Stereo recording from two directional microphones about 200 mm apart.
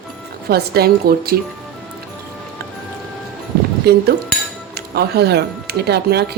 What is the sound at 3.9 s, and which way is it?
A woman's voice, 50° right (ahead or behind).